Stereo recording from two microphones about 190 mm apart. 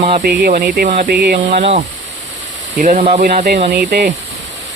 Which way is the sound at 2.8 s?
40° right (ahead or behind).